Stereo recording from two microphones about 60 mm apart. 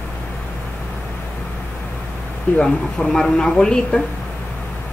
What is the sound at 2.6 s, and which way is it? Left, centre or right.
Speech, centre.